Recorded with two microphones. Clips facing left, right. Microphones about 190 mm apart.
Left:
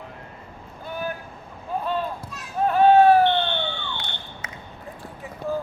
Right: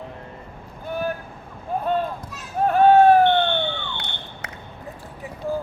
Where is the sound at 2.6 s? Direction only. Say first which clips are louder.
Right 1 dB; 50° right (ahead or behind); by 4.5 s 65° right (ahead or behind).